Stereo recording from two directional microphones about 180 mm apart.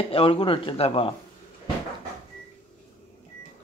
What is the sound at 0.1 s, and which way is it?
Speech, 30° left (ahead or behind).